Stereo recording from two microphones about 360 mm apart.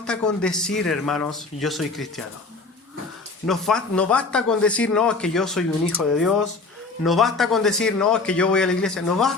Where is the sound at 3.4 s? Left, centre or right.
Centre.